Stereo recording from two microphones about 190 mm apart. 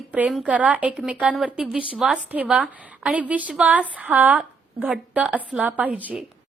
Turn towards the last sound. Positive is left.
turn(degrees=-10)  # may be behind; listen again after turning